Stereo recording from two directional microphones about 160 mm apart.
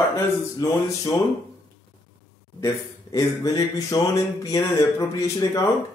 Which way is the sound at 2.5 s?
20° left (ahead or behind).